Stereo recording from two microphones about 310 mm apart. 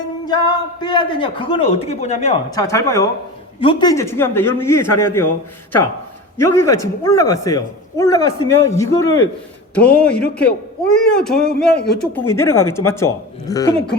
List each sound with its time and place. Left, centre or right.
0.3 s a man's voice: centre
2.6 s a man's voice: centre
6.3 s a man's voice: centre